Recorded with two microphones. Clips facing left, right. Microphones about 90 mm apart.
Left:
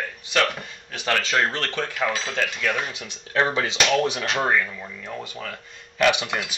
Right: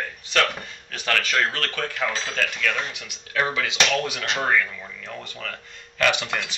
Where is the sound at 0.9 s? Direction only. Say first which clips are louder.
Left 1 dB; 20° left (ahead or behind).